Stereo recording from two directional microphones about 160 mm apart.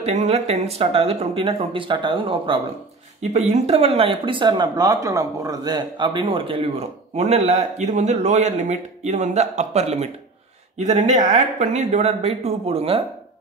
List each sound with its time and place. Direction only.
0.0 s speech: 45° right (ahead or behind)
3.2 s speech: 45° right (ahead or behind)